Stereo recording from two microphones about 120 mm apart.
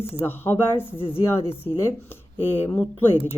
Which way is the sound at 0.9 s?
50° left (ahead or behind).